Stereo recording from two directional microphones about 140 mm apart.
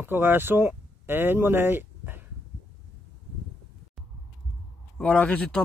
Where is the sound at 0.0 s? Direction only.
15° right (ahead or behind).